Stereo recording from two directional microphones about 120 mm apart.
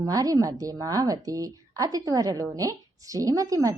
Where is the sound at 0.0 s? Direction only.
30° right (ahead or behind).